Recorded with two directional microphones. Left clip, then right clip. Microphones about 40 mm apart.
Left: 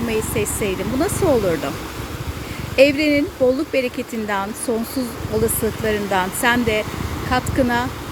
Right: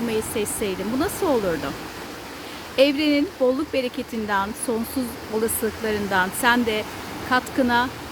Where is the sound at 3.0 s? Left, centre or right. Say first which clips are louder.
Left 3 dB; right.